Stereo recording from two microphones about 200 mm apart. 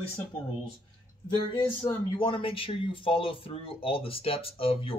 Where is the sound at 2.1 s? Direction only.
25° left (ahead or behind).